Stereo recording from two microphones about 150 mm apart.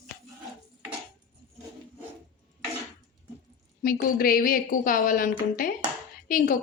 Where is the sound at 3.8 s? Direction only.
75° left (ahead or behind).